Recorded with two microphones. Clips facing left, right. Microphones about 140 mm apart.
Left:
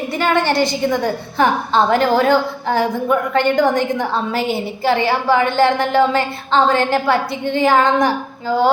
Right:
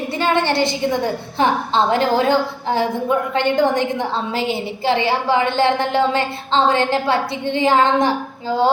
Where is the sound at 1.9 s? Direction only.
20° right (ahead or behind).